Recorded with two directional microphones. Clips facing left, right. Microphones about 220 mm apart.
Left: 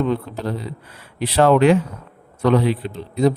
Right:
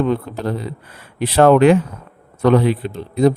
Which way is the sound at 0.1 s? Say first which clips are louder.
Right 2 dB; 55° right (ahead or behind).